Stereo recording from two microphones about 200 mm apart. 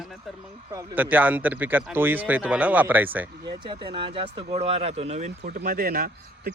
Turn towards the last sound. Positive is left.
turn(degrees=-50)  # may be behind; listen again after turning